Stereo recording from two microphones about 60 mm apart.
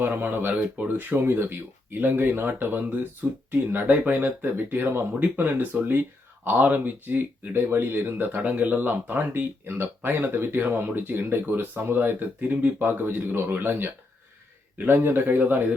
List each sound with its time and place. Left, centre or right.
0.0 s speech: right